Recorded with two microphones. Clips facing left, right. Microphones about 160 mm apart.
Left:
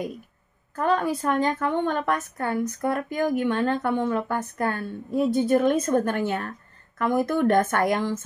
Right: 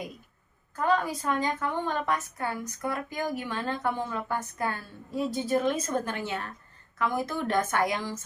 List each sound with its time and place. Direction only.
0.7 s a woman's voice: 55° left (ahead or behind)